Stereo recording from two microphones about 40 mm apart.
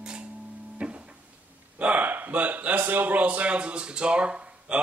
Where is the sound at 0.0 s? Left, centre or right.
Right.